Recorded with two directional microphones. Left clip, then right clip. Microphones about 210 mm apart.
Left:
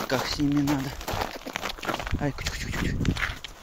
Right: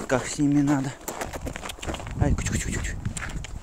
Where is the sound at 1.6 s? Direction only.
15° left (ahead or behind).